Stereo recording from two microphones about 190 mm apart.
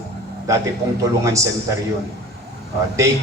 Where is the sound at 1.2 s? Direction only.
15° right (ahead or behind).